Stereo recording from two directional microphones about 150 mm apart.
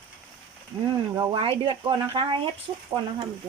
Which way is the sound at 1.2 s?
35° right (ahead or behind).